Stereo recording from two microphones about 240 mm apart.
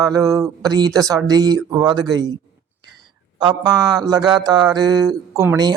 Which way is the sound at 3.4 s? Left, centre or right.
Centre.